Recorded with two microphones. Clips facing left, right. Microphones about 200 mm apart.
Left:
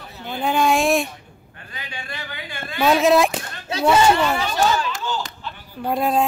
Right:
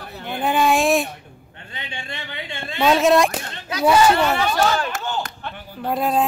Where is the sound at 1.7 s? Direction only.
25° right (ahead or behind).